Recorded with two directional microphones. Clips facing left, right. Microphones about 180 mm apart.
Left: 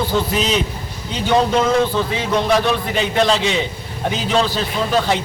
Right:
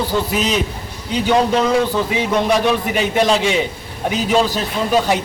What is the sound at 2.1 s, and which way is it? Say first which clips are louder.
A man's voice: right 1 dB; 15° right (ahead or behind).